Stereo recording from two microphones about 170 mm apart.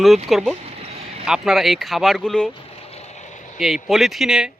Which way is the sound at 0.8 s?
35° right (ahead or behind).